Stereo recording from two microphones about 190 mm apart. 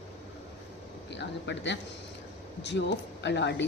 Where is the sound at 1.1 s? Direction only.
70° left (ahead or behind).